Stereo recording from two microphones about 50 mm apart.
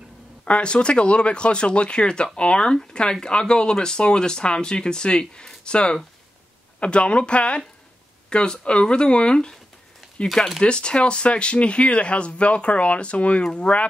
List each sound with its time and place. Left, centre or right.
0.5 s speech: left
10.6 s speech: centre